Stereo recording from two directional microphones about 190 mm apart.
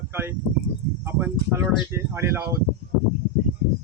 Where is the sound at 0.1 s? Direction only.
10° right (ahead or behind).